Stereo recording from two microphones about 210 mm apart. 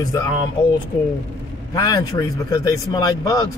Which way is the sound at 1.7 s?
20° left (ahead or behind).